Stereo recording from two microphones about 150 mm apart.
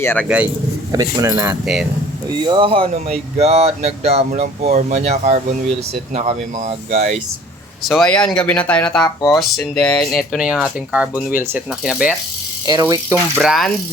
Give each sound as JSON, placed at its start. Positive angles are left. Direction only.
{"t": 0.0, "sound": "speech", "side_deg": 15}
{"t": 0.9, "sound": "speech", "side_deg": -20}
{"t": 1.6, "sound": "speech", "side_deg": 0}
{"t": 2.4, "sound": "speech", "side_deg": -30}
{"t": 7.9, "sound": "speech", "side_deg": 5}
{"t": 12.6, "sound": "speech", "side_deg": -25}
{"t": 13.4, "sound": "speech", "side_deg": 0}